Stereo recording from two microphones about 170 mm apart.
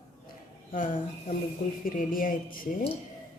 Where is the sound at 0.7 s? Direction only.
55° left (ahead or behind).